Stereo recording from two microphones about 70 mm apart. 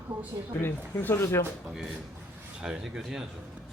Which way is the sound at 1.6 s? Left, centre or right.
Centre.